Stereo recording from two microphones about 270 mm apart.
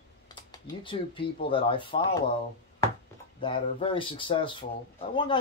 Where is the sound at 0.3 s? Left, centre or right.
Centre.